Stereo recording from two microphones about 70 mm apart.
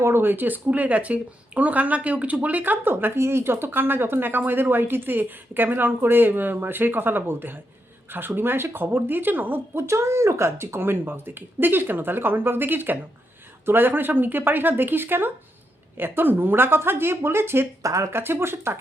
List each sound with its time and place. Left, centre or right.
0.0 s speech: right
17.8 s speech: right
18.1 s speech: right